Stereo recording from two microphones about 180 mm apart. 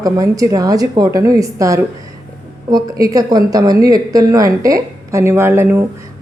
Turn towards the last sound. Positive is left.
turn(degrees=-15)  # may be behind; listen again after turning